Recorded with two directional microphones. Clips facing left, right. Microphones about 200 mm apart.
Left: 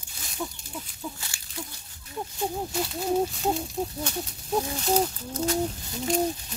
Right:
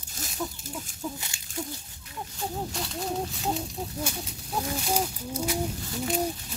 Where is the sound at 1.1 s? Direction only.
20° right (ahead or behind).